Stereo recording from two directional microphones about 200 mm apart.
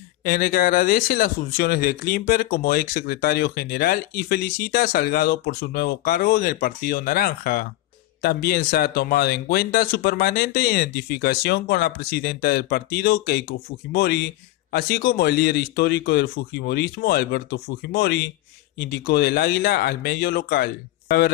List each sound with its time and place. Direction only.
0.2 s speech: 45° left (ahead or behind)